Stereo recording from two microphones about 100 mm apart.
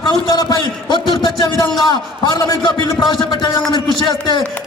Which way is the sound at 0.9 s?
45° left (ahead or behind).